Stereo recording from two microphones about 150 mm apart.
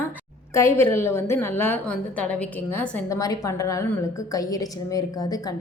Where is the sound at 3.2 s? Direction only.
20° left (ahead or behind).